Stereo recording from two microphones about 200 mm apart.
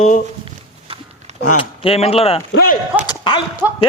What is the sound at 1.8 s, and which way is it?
Speech, 30° left (ahead or behind).